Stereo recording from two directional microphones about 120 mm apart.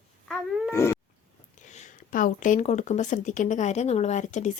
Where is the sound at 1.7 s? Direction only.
85° left.